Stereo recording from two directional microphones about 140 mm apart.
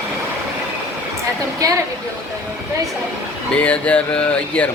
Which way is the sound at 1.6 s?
25° right (ahead or behind).